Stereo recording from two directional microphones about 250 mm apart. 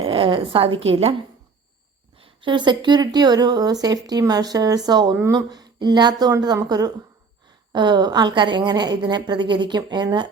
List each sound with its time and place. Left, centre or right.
0.0 s a sound: right
0.9 s a woman's voice: right
2.1 s speech: right